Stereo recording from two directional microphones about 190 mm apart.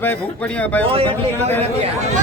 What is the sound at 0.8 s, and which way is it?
Speech, 30° right (ahead or behind).